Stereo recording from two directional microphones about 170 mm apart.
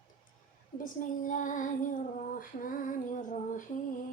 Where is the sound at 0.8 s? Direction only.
50° left (ahead or behind).